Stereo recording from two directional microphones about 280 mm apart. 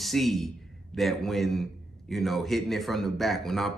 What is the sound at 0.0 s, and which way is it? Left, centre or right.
Speech, centre.